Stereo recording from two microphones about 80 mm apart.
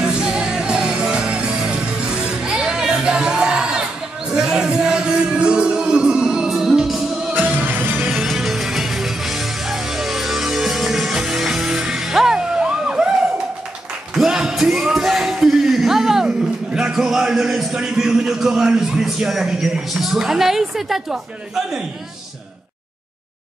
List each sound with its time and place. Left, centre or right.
0.0 s music: centre
7.3 s music: right
8.1 s music: centre
14.1 s a sound: centre